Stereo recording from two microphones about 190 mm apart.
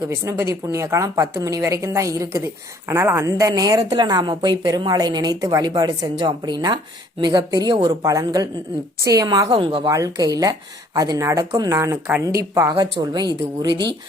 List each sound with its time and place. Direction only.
0.1 s a woman's voice: 15° right (ahead or behind)